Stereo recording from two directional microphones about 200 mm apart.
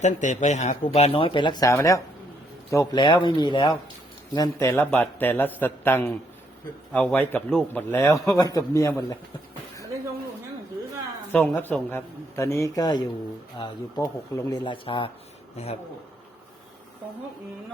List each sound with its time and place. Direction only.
0.0 s speech: 35° left (ahead or behind)
4.4 s a man's voice: 10° left (ahead or behind)
11.3 s a man's voice: 5° left (ahead or behind); by 15.8 s 30° left (ahead or behind)